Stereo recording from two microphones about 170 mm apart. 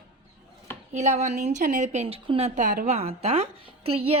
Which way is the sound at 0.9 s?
40° right (ahead or behind).